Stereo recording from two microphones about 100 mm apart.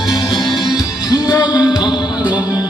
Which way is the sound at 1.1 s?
40° left (ahead or behind).